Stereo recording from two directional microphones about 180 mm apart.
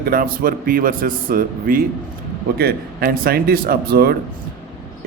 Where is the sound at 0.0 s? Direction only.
55° right (ahead or behind).